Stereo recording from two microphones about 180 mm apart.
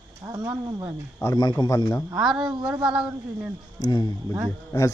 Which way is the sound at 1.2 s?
20° left (ahead or behind).